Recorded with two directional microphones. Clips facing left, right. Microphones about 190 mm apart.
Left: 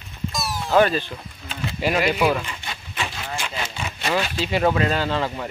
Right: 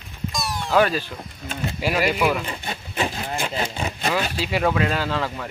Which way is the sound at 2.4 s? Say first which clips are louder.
Right 4 dB; 35° right (ahead or behind).